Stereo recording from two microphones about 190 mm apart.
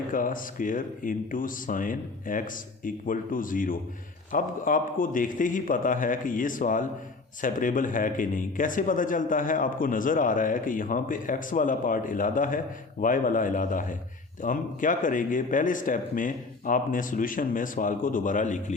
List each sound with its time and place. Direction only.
0.1 s a man's voice: 45° left (ahead or behind)